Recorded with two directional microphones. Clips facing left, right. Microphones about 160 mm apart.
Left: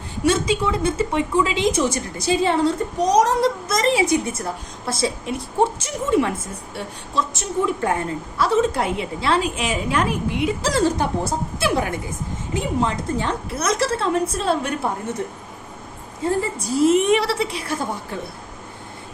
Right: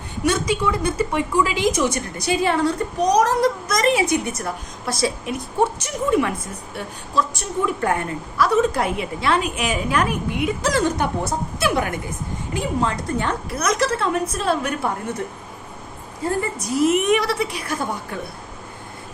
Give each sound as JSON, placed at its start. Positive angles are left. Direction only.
{"t": 0.3, "sound": "a woman's voice", "side_deg": 25}
{"t": 16.4, "sound": "a woman's voice", "side_deg": 30}